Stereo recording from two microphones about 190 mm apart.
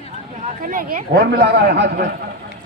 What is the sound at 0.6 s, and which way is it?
A man's voice, 50° right (ahead or behind).